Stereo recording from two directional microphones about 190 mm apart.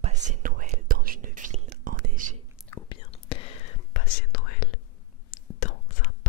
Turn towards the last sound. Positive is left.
turn(degrees=45)  # may be behind; listen again after turning